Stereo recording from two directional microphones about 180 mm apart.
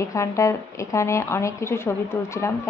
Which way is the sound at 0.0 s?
15° left (ahead or behind).